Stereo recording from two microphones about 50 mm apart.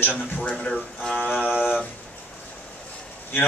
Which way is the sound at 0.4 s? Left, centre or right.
Left.